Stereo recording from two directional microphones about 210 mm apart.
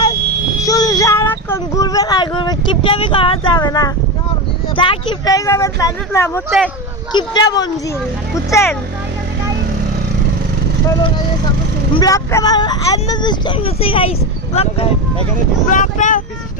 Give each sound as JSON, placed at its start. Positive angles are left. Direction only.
{"t": 0.7, "sound": "a sound", "side_deg": 20}
{"t": 4.7, "sound": "speech", "side_deg": 25}
{"t": 11.9, "sound": "speech", "side_deg": 15}